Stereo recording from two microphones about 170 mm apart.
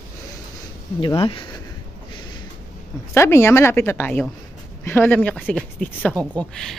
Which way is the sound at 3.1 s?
15° left (ahead or behind).